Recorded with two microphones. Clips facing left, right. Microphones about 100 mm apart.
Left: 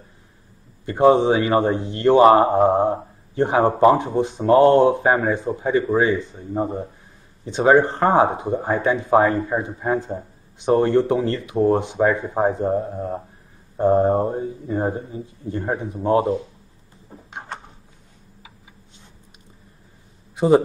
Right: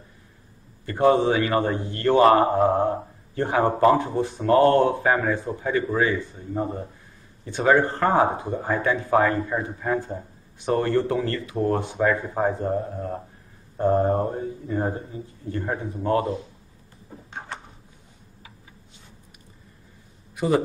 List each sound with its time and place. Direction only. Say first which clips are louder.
0.8 s speech: left 4 dB; 20° left (ahead or behind)
17.1 s a sound: left 2 dB; 10° left (ahead or behind)
20.3 s a man's voice: left 6 dB; 25° left (ahead or behind)